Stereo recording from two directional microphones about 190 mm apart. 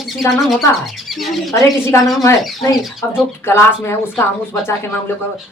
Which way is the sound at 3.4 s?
10° left (ahead or behind).